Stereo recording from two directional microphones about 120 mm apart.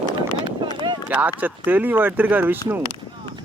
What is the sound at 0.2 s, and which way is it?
Run, 40° right (ahead or behind).